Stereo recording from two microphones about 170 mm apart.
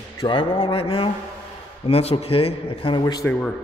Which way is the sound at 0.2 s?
30° left (ahead or behind).